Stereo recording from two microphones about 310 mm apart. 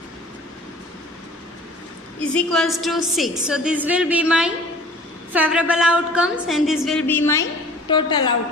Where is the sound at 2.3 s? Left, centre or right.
Centre.